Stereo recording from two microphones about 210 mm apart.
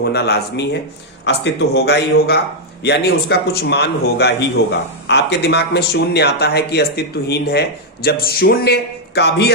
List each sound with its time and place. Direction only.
0.0 s speech: 50° left (ahead or behind)